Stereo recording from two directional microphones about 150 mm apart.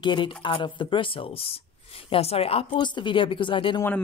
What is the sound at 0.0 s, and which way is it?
Speech, 30° left (ahead or behind).